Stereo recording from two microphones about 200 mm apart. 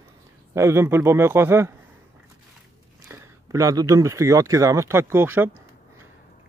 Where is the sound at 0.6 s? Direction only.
15° right (ahead or behind).